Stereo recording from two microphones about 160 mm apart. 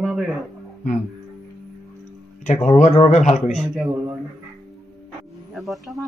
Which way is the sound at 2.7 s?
45° left (ahead or behind).